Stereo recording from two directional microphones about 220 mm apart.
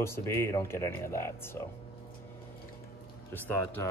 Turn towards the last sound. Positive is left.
turn(degrees=10)  # may be behind; listen again after turning